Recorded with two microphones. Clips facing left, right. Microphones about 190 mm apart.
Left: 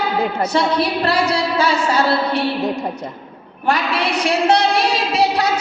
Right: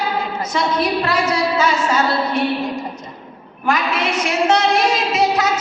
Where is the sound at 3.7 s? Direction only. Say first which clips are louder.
Left 1 dB; 35° left (ahead or behind).